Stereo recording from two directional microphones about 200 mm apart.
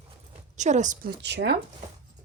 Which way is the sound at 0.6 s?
35° right (ahead or behind).